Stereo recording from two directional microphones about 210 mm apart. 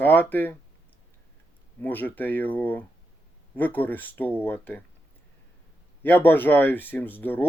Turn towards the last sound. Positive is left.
turn(degrees=10)  # may be behind; listen again after turning